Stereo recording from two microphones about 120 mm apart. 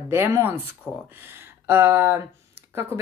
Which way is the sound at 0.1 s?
20° right (ahead or behind).